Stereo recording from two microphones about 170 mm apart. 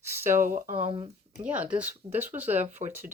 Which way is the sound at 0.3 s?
55° right (ahead or behind).